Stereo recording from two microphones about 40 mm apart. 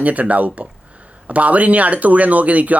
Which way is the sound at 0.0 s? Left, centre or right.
Right.